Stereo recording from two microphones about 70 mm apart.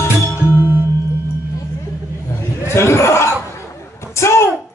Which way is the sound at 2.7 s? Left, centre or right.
Left.